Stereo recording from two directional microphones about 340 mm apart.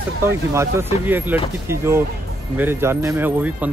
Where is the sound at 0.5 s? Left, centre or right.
Centre.